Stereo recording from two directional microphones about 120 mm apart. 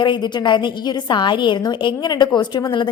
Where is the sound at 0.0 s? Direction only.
40° left (ahead or behind).